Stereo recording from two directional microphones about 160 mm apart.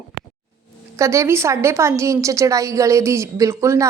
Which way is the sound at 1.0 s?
20° right (ahead or behind).